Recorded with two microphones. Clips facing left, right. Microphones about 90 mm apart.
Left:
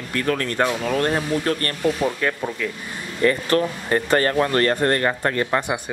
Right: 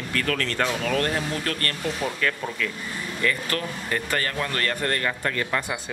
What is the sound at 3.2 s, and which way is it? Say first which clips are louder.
Speech: left 9 dB; 30° left (ahead or behind).